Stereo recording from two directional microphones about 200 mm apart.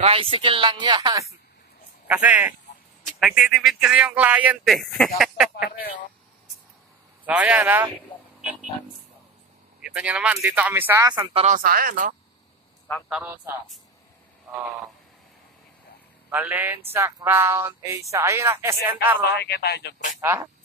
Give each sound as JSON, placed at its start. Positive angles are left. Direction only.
{"t": 0.0, "sound": "speech", "side_deg": -30}
{"t": 2.0, "sound": "speech", "side_deg": -10}
{"t": 5.8, "sound": "a man's voice", "side_deg": 45}
{"t": 7.2, "sound": "speech", "side_deg": -5}
{"t": 9.8, "sound": "speech", "side_deg": -5}
{"t": 11.4, "sound": "speech", "side_deg": -45}
{"t": 13.1, "sound": "speech", "side_deg": -10}
{"t": 16.3, "sound": "speech", "side_deg": -10}
{"t": 19.3, "sound": "speech", "side_deg": 55}
{"t": 20.2, "sound": "speech", "side_deg": -10}